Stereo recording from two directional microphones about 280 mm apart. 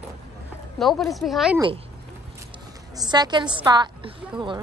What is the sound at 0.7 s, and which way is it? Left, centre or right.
Speech, centre.